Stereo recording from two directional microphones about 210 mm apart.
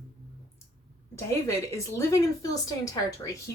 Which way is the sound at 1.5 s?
15° left (ahead or behind).